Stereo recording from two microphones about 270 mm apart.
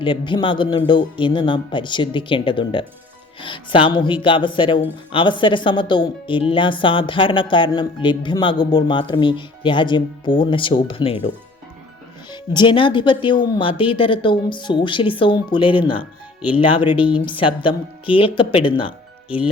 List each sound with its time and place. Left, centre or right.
0.0 s speech: centre
12.3 s a woman's voice: centre